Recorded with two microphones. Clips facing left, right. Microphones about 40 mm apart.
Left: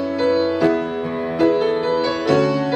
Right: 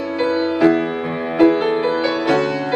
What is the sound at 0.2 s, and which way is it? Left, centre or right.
Music, right.